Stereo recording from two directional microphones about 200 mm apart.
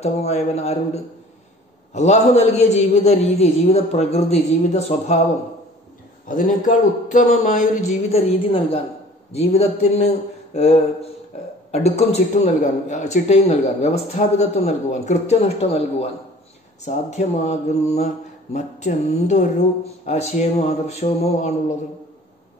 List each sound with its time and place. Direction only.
0.0 s mantra: 30° left (ahead or behind)
6.2 s mantra: 40° left (ahead or behind)